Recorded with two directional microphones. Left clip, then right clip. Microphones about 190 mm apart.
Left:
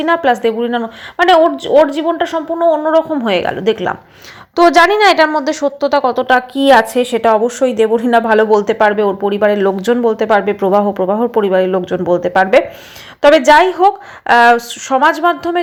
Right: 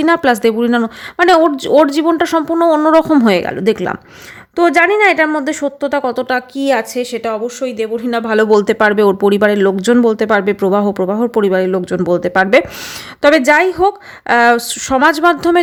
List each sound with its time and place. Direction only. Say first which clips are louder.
0.0 s a woman's voice: right 1 dB; 35° right (ahead or behind)
3.2 s a woman's voice: right 1 dB; 30° right (ahead or behind); by 8.0 s 5° left (ahead or behind)
8.2 s a woman's voice: left 1 dB; 25° right (ahead or behind)